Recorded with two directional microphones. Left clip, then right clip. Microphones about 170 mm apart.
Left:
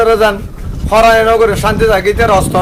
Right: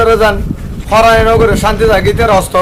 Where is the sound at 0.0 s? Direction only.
10° left (ahead or behind).